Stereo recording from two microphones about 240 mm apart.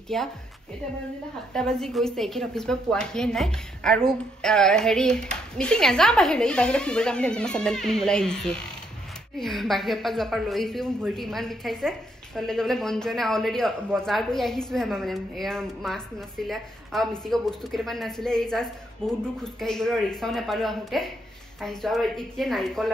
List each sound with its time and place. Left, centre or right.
0.1 s a woman's voice: centre
1.5 s a woman's voice: centre